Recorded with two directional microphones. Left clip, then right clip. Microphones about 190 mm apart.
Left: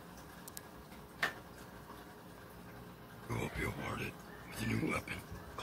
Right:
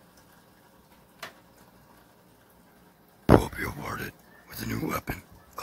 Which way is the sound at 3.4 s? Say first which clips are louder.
Right 7 dB; 45° right (ahead or behind).